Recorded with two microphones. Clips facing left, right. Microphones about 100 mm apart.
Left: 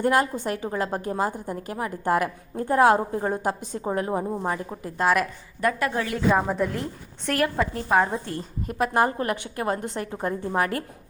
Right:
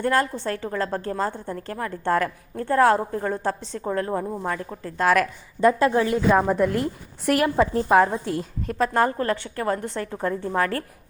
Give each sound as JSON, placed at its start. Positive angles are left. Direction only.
{"t": 0.0, "sound": "a woman's voice", "side_deg": 15}
{"t": 4.9, "sound": "a woman's voice", "side_deg": 5}
{"t": 5.5, "sound": "a woman's voice", "side_deg": -25}
{"t": 6.3, "sound": "a woman's voice", "side_deg": 0}
{"t": 7.3, "sound": "a woman's voice", "side_deg": -20}
{"t": 7.9, "sound": "a woman's voice", "side_deg": 0}
{"t": 8.8, "sound": "a woman's voice", "side_deg": 15}